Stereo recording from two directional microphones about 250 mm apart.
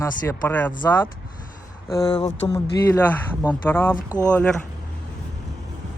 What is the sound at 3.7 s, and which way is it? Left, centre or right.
Speech, centre.